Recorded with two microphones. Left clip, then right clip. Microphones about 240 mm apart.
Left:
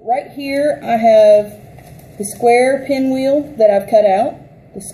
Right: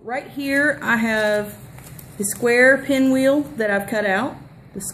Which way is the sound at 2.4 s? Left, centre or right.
Right.